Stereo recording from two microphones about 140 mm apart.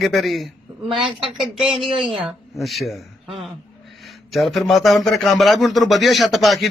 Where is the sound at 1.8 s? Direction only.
Centre (ahead or behind).